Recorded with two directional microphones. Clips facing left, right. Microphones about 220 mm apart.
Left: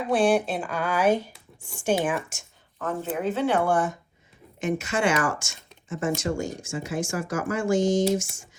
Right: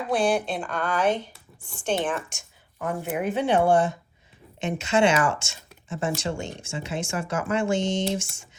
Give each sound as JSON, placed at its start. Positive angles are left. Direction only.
{"t": 0.1, "sound": "speech", "side_deg": 0}
{"t": 2.7, "sound": "speech", "side_deg": -10}